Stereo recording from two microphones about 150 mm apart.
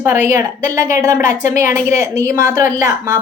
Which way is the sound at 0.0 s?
15° right (ahead or behind).